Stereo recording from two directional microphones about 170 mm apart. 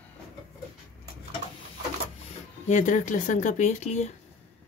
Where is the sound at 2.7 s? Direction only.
45° left (ahead or behind).